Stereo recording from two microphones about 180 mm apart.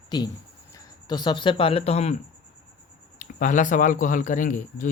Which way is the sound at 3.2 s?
45° left (ahead or behind).